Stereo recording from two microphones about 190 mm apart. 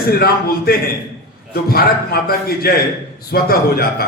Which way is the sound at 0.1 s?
55° left (ahead or behind).